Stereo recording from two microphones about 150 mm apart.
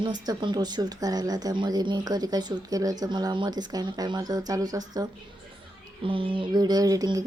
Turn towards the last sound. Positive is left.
turn(degrees=-25)  # may be behind; listen again after turning